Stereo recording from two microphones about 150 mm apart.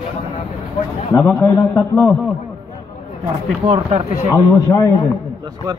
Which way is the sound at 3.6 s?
40° right (ahead or behind).